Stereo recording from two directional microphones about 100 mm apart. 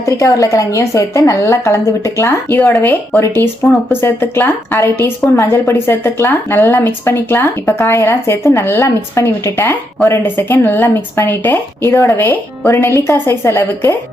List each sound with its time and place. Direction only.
0.0 s a woman's voice: 35° left (ahead or behind)
4.0 s speech: 20° left (ahead or behind)